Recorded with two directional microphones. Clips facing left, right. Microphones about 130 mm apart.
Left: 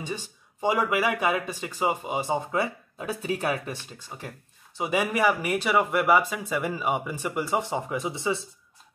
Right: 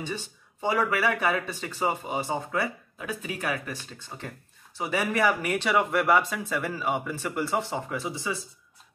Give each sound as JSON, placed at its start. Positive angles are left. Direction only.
{"t": 0.0, "sound": "speech", "side_deg": 15}
{"t": 4.1, "sound": "speech", "side_deg": 10}